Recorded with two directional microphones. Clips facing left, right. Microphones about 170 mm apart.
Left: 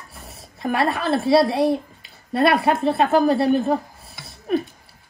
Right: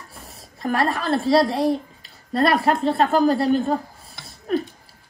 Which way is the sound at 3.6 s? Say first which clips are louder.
Left 2 dB; centre (ahead or behind).